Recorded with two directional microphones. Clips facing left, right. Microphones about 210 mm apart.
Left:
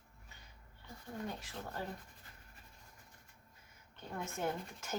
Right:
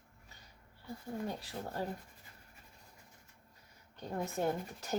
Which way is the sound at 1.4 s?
35° right (ahead or behind).